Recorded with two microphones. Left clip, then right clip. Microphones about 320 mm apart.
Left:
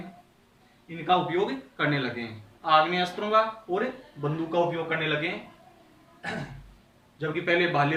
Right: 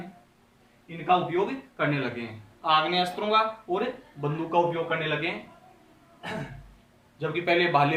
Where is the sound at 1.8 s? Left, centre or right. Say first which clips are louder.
Even; centre.